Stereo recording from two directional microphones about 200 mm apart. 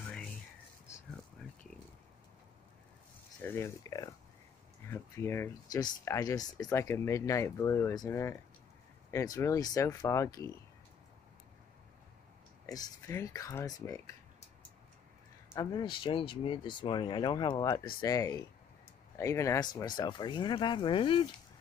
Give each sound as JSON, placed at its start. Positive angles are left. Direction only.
{"t": 3.4, "sound": "speech", "side_deg": 15}
{"t": 12.6, "sound": "speech", "side_deg": 15}
{"t": 15.5, "sound": "speech", "side_deg": 20}